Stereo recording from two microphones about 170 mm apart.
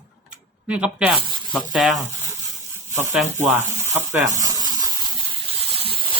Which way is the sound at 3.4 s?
15° right (ahead or behind).